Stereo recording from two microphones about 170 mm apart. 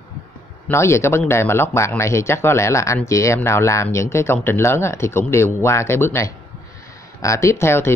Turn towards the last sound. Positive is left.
turn(degrees=15)  # may be behind; listen again after turning